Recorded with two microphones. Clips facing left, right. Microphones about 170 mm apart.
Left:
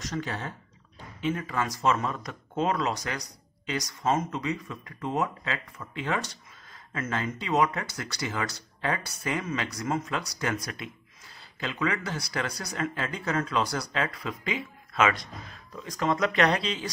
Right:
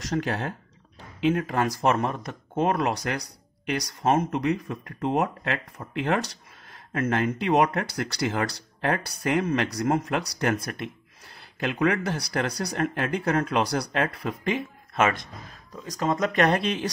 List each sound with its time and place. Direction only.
0.1 s speech: 65° right (ahead or behind)
15.8 s speech: 40° right (ahead or behind); by 16.9 s 55° right (ahead or behind)